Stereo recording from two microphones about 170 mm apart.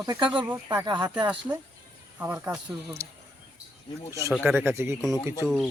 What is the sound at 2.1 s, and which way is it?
Speech, 15° right (ahead or behind).